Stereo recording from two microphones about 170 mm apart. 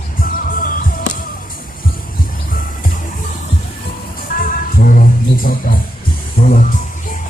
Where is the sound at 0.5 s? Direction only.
55° left (ahead or behind).